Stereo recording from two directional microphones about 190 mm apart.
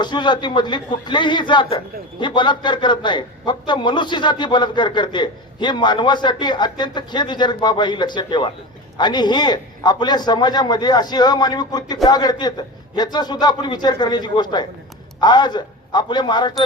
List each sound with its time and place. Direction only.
0.0 s a man's voice: 25° left (ahead or behind)